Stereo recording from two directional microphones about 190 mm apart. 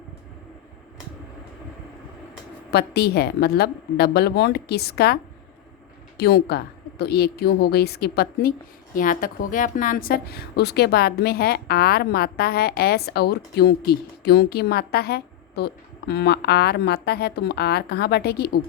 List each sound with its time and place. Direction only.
2.6 s a woman's voice: 60° left (ahead or behind)